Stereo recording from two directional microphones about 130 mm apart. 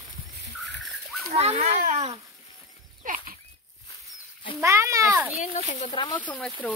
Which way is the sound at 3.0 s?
90° right.